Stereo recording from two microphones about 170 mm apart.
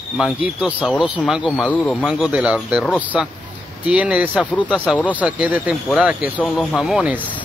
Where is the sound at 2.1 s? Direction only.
10° right (ahead or behind).